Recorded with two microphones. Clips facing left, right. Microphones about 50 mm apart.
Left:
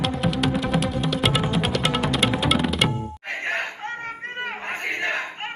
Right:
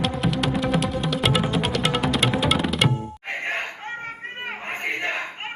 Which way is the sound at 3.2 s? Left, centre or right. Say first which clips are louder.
Left 1 dB; right.